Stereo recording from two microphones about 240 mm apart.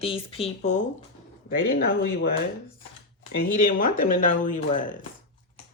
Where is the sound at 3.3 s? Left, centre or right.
Left.